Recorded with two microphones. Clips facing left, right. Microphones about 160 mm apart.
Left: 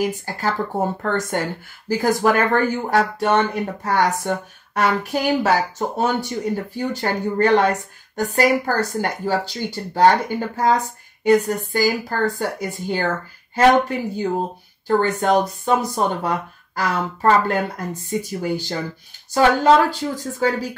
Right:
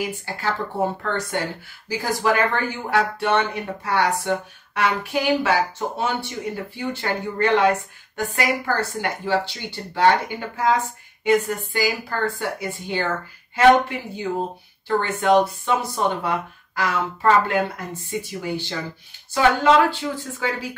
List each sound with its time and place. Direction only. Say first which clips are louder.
0.0 s speech: left 4 dB; 40° left (ahead or behind)